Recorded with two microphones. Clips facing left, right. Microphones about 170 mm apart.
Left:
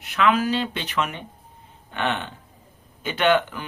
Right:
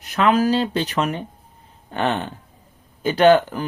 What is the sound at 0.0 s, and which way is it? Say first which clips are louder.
Speech: right 3 dB; 40° right (ahead or behind).